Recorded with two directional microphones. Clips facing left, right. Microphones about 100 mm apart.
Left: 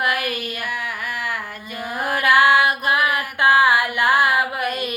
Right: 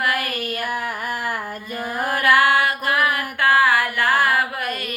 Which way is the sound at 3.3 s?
15° left (ahead or behind).